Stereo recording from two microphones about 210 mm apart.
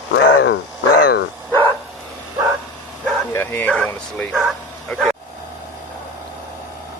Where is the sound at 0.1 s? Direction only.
60° left (ahead or behind).